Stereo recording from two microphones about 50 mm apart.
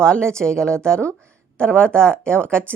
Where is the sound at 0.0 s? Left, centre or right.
Centre.